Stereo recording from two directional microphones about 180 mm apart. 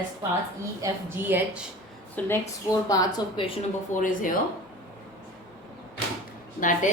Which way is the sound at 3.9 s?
45° left (ahead or behind).